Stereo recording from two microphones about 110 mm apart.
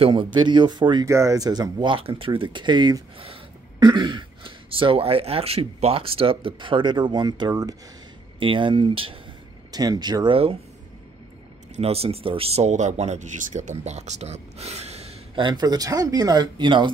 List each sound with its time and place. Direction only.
0.0 s speech: 50° right (ahead or behind)
1.0 s speech: 30° right (ahead or behind)
8.4 s speech: 50° right (ahead or behind)
9.7 s speech: 40° right (ahead or behind)
10.3 s speech: 55° right (ahead or behind)
11.7 s speech: 65° right (ahead or behind)
15.3 s speech: 45° right (ahead or behind)